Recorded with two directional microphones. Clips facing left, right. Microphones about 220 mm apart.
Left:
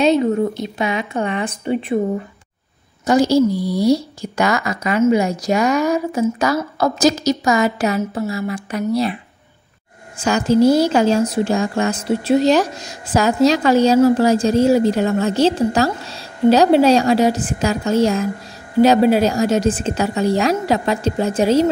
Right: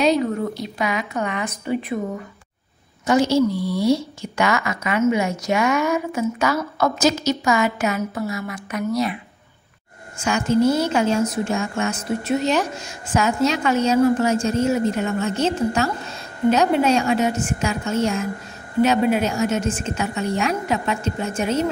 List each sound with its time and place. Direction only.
0.0 s a woman's voice: 25° left (ahead or behind)
3.1 s a woman's voice: 35° left (ahead or behind)
10.1 s a woman's voice: 35° left (ahead or behind)